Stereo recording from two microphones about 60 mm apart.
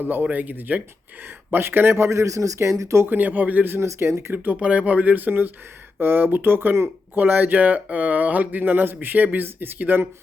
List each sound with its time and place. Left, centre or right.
0.0 s speech: right
1.5 s speech: right
2.0 s speech: right
3.1 s speech: right
3.8 s speech: right
4.4 s speech: right